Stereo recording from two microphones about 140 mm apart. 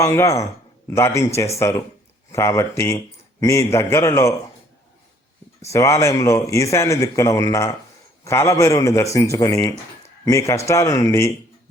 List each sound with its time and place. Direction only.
0.0 s a man's voice: 25° left (ahead or behind)
5.6 s a man's voice: 20° left (ahead or behind)